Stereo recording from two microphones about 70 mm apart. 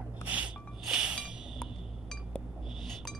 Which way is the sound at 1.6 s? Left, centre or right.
Centre.